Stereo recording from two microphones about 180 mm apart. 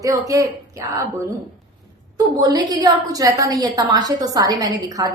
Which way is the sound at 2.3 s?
20° right (ahead or behind).